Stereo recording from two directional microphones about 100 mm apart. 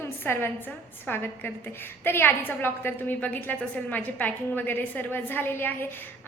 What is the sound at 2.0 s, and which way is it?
A woman's voice, 20° left (ahead or behind).